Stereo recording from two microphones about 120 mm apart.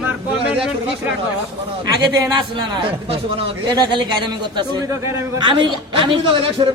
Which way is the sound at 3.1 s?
50° right (ahead or behind).